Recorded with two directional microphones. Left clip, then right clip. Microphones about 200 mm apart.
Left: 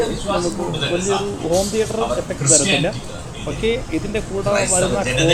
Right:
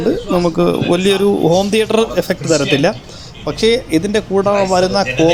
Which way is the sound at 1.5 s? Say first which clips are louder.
Right 6 dB; 60° right (ahead or behind).